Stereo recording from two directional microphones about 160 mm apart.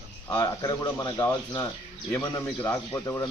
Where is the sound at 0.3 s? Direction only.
20° left (ahead or behind).